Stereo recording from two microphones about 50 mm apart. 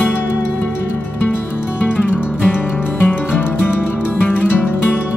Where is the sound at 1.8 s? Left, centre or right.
Left.